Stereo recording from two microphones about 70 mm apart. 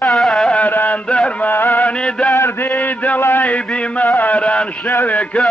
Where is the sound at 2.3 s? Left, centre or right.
Left.